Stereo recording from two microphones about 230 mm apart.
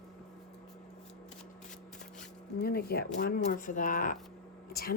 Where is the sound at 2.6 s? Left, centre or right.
Left.